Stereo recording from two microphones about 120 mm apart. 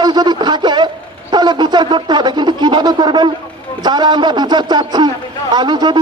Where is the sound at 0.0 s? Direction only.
35° right (ahead or behind).